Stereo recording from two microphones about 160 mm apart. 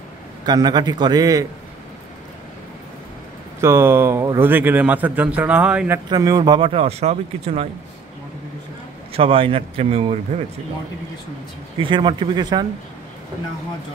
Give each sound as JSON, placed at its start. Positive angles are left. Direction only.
{"t": 0.5, "sound": "a man's voice", "side_deg": -25}
{"t": 3.6, "sound": "a man's voice", "side_deg": -15}
{"t": 6.0, "sound": "speech", "side_deg": -25}
{"t": 9.1, "sound": "speech", "side_deg": -35}
{"t": 11.8, "sound": "a man's voice", "side_deg": -30}